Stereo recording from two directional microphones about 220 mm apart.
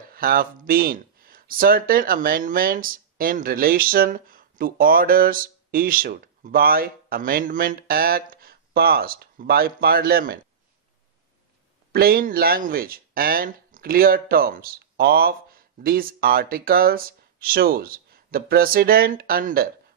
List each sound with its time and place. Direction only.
0.1 s speech: 40° right (ahead or behind)
11.9 s speech: 45° right (ahead or behind)